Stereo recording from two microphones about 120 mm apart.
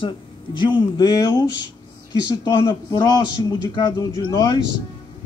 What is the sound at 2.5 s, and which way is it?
Speech, 35° left (ahead or behind).